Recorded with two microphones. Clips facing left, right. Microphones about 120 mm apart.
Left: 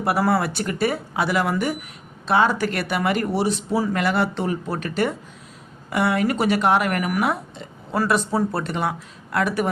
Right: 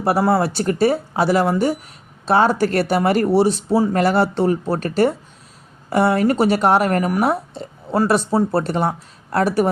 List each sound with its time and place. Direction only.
0.0 s speech: 30° right (ahead or behind)